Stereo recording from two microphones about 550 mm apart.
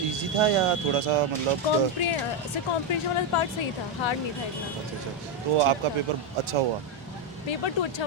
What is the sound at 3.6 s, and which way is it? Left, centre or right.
Speech, left.